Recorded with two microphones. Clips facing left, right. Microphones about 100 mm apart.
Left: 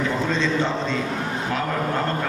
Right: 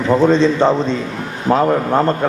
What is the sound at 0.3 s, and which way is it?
Speech, 35° right (ahead or behind).